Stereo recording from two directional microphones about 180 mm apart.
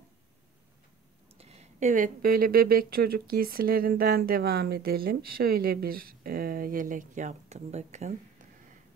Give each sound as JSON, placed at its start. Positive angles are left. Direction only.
{"t": 1.4, "sound": "speech", "side_deg": -35}